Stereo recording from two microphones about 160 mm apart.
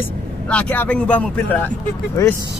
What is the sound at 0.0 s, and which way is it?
Speech, 10° left (ahead or behind).